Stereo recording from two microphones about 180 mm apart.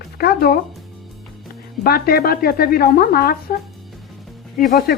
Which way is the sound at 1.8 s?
55° left (ahead or behind).